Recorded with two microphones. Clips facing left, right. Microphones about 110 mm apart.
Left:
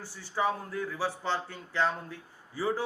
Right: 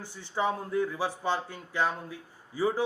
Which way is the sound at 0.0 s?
20° right (ahead or behind).